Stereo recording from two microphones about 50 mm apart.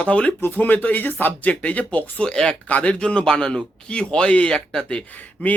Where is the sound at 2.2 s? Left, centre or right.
Centre.